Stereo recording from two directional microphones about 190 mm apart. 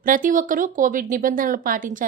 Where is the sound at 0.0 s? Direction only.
45° right (ahead or behind).